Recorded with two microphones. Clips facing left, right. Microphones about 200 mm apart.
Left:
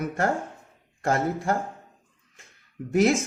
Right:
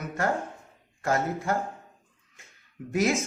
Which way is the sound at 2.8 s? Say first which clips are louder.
Left 3 dB; 40° left (ahead or behind).